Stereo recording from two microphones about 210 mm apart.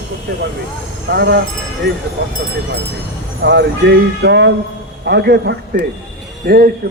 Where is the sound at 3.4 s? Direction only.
55° right (ahead or behind).